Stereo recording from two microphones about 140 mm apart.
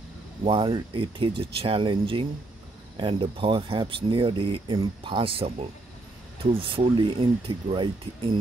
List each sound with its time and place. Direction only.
0.4 s speech: 35° right (ahead or behind)